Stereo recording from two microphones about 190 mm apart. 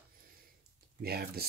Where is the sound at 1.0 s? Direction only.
55° right (ahead or behind).